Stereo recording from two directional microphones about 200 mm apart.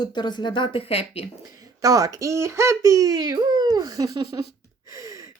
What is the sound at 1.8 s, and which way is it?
Speech, 15° right (ahead or behind).